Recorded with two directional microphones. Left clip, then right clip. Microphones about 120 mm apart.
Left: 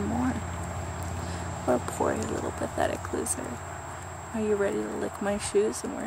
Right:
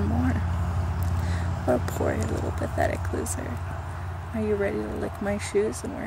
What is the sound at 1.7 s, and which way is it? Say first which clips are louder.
Speech: right 1 dB; 15° left (ahead or behind).